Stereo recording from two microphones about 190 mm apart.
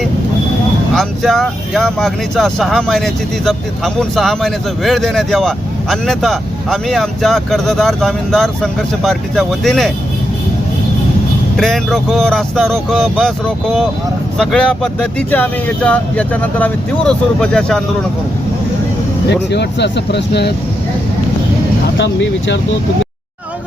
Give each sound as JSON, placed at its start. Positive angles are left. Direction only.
{"t": 0.9, "sound": "speech", "side_deg": 0}
{"t": 11.5, "sound": "speech", "side_deg": 0}
{"t": 14.3, "sound": "speech", "side_deg": 5}
{"t": 19.3, "sound": "speech", "side_deg": 65}
{"t": 21.9, "sound": "speech", "side_deg": 70}